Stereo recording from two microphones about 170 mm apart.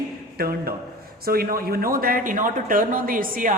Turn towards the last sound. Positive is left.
turn(degrees=-55)  # may be behind; listen again after turning